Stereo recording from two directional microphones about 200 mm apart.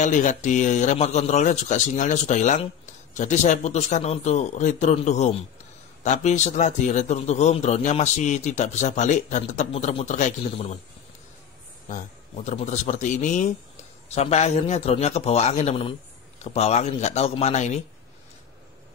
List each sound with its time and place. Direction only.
0.0 s a man's voice: 40° left (ahead or behind)
11.9 s a man's voice: 35° left (ahead or behind)